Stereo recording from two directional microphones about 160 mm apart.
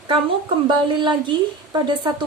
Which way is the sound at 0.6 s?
30° right (ahead or behind).